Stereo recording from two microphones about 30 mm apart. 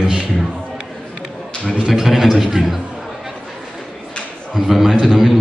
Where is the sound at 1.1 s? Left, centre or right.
Left.